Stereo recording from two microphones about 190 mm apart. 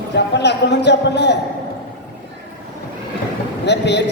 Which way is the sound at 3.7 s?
65° left (ahead or behind).